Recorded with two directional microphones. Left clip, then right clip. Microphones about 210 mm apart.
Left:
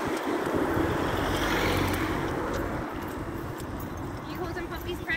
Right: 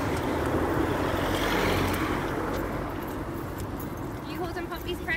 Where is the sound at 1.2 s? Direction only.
55° right (ahead or behind).